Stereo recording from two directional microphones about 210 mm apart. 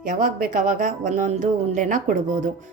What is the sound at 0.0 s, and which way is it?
Speech, 40° right (ahead or behind).